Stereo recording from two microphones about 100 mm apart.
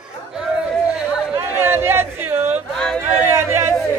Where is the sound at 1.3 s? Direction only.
25° right (ahead or behind).